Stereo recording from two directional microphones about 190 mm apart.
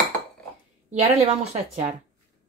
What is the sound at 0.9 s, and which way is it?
Speech, 35° right (ahead or behind).